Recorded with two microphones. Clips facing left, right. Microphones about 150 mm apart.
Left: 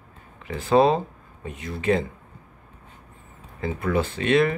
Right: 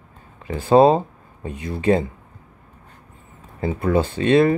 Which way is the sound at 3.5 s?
25° right (ahead or behind).